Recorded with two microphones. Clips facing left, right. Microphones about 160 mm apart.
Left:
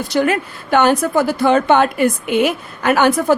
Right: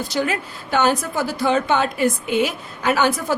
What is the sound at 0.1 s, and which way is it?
A woman's voice, 60° left (ahead or behind).